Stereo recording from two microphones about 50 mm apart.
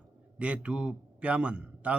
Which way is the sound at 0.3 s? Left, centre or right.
Right.